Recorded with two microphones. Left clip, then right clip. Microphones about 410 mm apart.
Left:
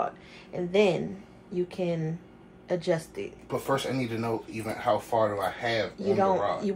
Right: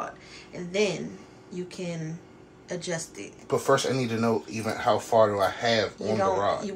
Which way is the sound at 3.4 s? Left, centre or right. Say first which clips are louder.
Right 6 dB; right.